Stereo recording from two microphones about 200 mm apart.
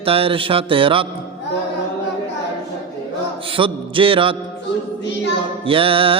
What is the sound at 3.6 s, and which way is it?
Mantra, 25° right (ahead or behind).